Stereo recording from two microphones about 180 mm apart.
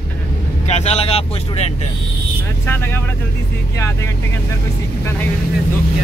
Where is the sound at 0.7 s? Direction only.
35° left (ahead or behind).